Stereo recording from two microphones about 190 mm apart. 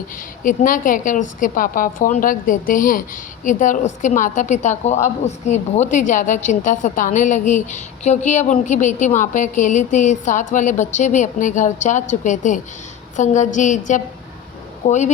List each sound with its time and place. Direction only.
0.4 s a woman's voice: 45° left (ahead or behind)